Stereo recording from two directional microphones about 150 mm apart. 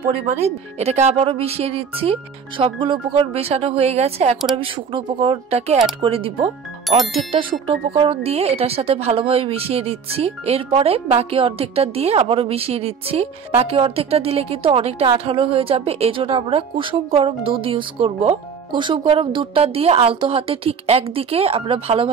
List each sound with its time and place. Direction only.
0.3 s speech: 45° right (ahead or behind)
4.6 s speech: 35° right (ahead or behind)